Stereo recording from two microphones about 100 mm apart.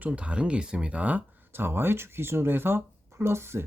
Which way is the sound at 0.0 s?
10° right (ahead or behind).